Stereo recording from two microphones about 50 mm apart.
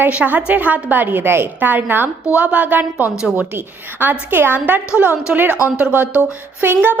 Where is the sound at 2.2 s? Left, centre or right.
Right.